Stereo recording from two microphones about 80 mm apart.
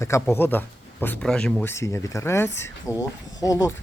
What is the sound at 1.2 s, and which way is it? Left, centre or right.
Speech, centre.